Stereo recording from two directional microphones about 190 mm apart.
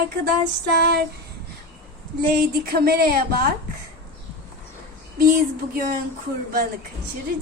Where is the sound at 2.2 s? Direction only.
50° right (ahead or behind).